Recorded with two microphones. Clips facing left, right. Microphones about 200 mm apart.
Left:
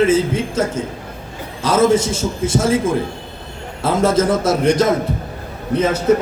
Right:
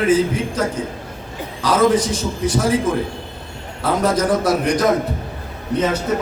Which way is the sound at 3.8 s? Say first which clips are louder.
Left 2 dB; 25° left (ahead or behind).